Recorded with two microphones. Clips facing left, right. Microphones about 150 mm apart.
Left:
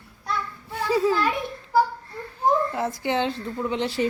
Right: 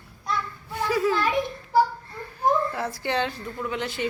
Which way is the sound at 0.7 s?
30° left (ahead or behind).